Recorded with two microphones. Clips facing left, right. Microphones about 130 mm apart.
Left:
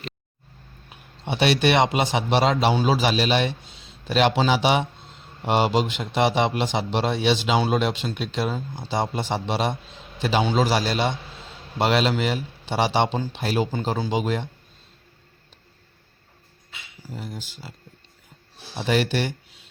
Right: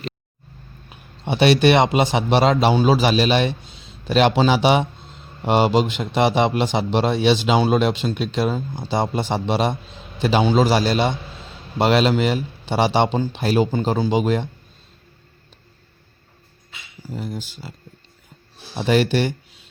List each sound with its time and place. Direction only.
1.3 s a man's voice: 45° right (ahead or behind)
17.2 s a man's voice: 45° right (ahead or behind)
18.8 s a man's voice: 45° right (ahead or behind)